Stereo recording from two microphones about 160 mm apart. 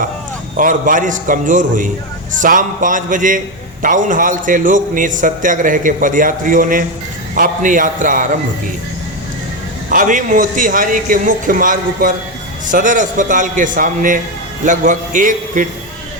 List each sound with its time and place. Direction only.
0.5 s a man's voice: 60° right (ahead or behind)
9.9 s a man's voice: 55° right (ahead or behind)